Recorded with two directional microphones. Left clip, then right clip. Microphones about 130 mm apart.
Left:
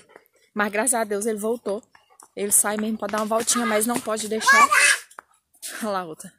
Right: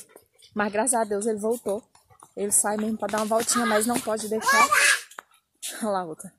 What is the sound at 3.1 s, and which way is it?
Speech, 30° left (ahead or behind).